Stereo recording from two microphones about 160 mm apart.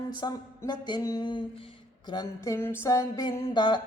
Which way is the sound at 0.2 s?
25° left (ahead or behind).